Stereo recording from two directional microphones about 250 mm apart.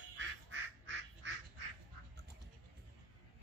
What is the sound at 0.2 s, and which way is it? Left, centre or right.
Quack, right.